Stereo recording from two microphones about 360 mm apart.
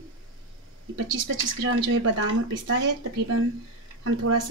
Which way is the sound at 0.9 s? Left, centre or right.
Right.